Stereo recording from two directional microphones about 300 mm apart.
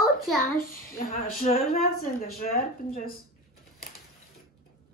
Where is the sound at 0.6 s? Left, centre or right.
Left.